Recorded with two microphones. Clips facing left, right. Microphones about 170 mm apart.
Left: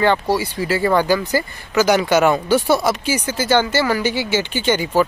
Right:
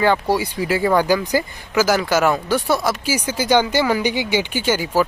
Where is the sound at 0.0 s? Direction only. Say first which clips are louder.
Even; 10° right (ahead or behind).